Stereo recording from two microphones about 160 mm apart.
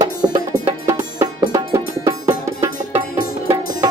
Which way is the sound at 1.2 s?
20° right (ahead or behind).